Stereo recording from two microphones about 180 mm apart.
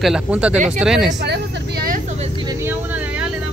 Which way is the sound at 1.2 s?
60° right (ahead or behind).